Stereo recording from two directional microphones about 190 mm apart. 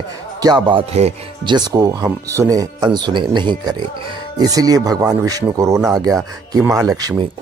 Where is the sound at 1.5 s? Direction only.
20° right (ahead or behind).